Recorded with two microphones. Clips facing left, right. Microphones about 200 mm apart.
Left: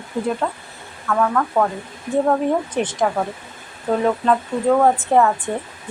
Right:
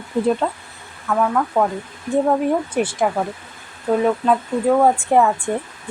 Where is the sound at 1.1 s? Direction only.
10° right (ahead or behind).